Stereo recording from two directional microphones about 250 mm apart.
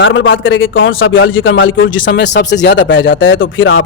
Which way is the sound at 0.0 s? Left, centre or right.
Left.